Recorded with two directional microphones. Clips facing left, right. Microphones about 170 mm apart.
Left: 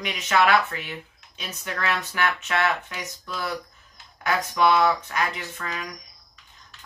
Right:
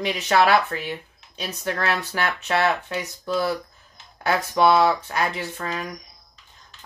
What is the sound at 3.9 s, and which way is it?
Speech, 30° right (ahead or behind).